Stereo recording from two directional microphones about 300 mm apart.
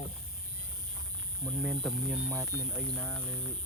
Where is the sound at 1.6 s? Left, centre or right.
Centre.